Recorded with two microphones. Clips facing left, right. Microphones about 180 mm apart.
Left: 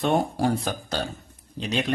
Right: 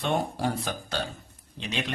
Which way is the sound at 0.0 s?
45° left (ahead or behind).